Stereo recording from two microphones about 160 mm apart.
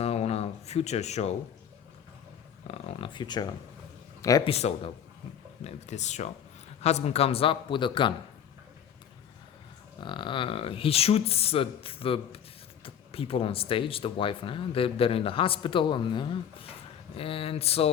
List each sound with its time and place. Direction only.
0.0 s a sound: 40° left (ahead or behind)
2.6 s a man's voice: 30° left (ahead or behind)
4.4 s speech: 40° left (ahead or behind)
10.0 s speech: 30° left (ahead or behind)